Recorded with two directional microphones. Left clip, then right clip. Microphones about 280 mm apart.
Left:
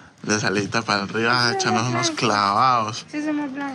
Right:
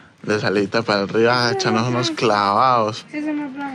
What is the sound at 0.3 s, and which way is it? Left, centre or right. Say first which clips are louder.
A man's voice: right 3 dB; centre.